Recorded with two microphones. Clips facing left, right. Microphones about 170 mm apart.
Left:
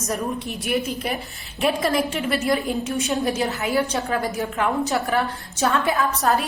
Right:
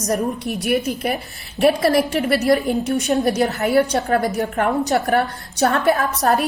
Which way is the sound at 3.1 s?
40° right (ahead or behind).